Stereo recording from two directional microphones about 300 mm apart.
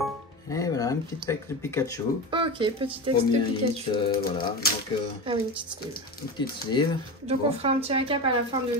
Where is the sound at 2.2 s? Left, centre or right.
Centre.